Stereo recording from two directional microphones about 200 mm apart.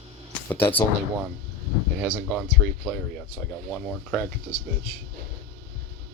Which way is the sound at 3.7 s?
5° left (ahead or behind).